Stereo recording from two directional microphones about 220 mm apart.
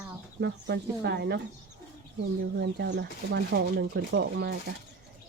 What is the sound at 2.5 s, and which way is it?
Speech, 50° right (ahead or behind).